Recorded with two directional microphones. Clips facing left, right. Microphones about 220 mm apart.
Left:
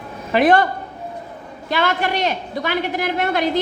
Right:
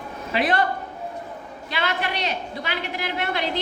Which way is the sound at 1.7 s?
45° left (ahead or behind).